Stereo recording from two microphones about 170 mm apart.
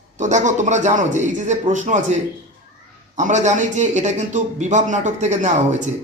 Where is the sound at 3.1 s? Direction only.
45° right (ahead or behind).